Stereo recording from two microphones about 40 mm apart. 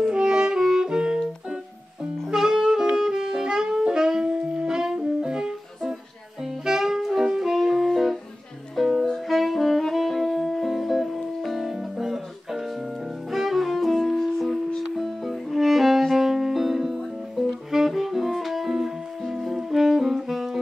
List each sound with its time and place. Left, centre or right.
0.0 s saxophone: right
7.2 s music: centre
9.3 s saxophone: centre
13.3 s music: centre